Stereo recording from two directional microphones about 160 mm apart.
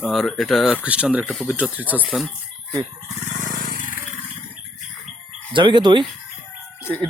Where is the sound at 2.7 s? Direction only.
20° right (ahead or behind).